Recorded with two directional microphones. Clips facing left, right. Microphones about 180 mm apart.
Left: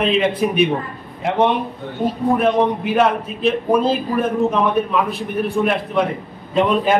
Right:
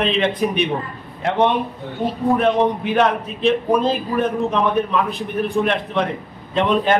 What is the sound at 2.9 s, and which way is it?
A man's voice, 5° left (ahead or behind).